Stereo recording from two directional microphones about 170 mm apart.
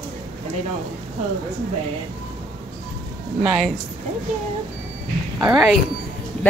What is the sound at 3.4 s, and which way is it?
Speech, centre (ahead or behind).